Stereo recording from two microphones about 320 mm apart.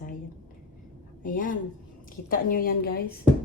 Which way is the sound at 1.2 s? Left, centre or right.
Left.